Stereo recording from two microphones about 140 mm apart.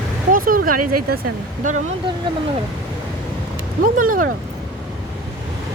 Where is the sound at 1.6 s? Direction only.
70° right (ahead or behind).